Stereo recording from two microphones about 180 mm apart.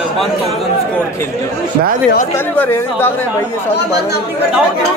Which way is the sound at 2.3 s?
10° left (ahead or behind).